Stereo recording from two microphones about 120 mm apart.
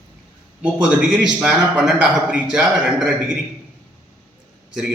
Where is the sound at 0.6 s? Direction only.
10° right (ahead or behind).